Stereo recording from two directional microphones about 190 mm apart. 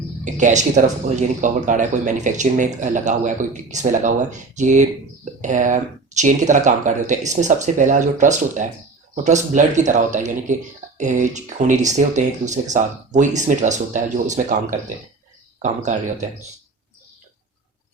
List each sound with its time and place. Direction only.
0.3 s speech: 40° right (ahead or behind)